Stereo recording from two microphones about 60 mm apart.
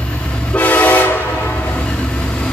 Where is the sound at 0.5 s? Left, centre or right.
Left.